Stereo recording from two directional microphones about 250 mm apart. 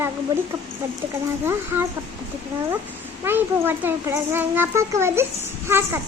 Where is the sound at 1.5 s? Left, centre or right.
Centre.